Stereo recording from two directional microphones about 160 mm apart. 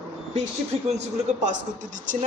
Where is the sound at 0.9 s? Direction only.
50° right (ahead or behind).